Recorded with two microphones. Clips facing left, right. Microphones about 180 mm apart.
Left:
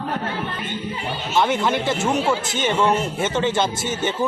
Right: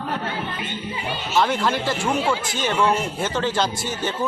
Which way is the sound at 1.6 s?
20° left (ahead or behind).